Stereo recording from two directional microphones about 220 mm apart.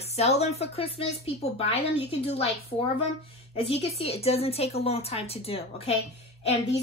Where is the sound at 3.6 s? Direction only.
25° left (ahead or behind).